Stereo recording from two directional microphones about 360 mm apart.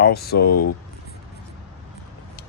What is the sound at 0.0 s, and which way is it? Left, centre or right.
Speech, left.